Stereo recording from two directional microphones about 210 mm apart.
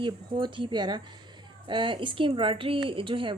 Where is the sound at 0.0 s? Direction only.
25° right (ahead or behind).